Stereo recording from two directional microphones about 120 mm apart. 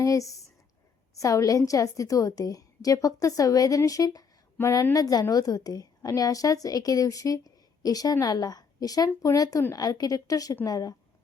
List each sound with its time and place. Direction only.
0.0 s a woman's voice: 25° left (ahead or behind)